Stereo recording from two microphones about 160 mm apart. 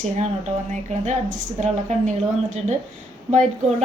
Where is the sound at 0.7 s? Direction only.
45° right (ahead or behind).